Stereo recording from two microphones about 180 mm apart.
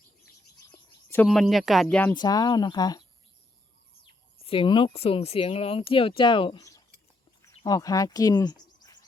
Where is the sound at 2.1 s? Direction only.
20° left (ahead or behind).